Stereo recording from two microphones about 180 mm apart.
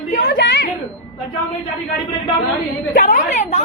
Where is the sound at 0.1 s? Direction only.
55° left (ahead or behind).